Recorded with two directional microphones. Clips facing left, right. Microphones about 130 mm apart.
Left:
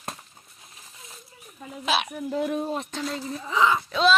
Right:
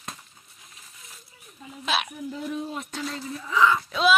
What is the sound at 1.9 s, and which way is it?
Speech, centre (ahead or behind).